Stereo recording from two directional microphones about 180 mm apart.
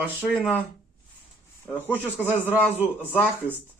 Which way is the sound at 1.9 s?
10° right (ahead or behind).